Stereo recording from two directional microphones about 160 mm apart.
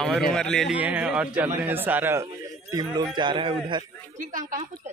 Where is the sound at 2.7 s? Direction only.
25° right (ahead or behind).